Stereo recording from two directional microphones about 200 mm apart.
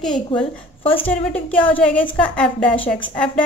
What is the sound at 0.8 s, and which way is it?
Speech, 25° left (ahead or behind).